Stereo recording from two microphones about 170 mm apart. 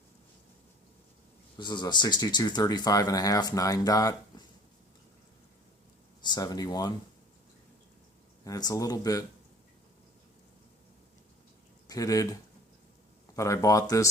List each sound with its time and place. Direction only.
1.5 s speech: 25° left (ahead or behind)
6.2 s speech: 25° left (ahead or behind)
8.4 s speech: 20° left (ahead or behind)
11.9 s speech: 20° left (ahead or behind)